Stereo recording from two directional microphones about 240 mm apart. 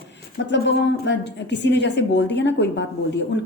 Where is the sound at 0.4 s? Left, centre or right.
Left.